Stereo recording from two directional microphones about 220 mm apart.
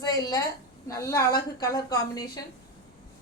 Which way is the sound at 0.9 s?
15° left (ahead or behind).